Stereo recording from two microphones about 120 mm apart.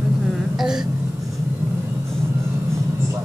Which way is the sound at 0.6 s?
5° right (ahead or behind).